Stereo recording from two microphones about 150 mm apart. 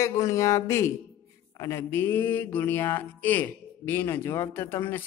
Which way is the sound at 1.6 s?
15° left (ahead or behind).